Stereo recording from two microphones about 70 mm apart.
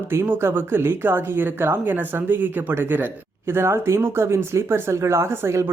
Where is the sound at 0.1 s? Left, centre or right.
Right.